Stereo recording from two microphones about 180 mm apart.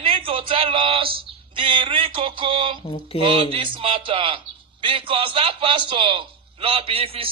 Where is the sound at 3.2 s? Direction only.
30° right (ahead or behind).